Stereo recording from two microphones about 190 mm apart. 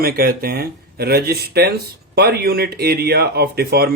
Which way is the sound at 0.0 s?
50° right (ahead or behind).